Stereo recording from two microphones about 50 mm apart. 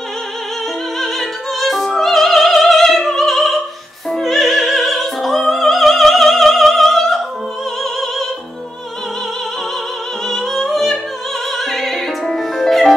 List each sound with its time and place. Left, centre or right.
0.9 s opera: centre
10.2 s music: centre